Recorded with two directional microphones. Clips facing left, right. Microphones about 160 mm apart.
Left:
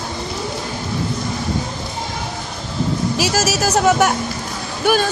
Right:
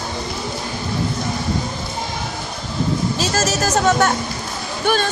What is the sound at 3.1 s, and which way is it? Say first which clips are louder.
Speech: left 1 dB; 10° left (ahead or behind).